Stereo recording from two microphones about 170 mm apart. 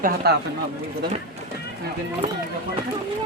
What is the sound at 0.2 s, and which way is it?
Speech, 70° right (ahead or behind).